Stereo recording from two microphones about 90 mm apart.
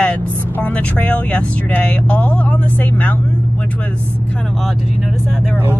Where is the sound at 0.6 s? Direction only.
15° left (ahead or behind).